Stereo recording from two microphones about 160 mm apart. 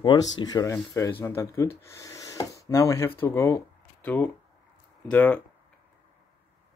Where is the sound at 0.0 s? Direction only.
30° left (ahead or behind); by 5.4 s 10° left (ahead or behind).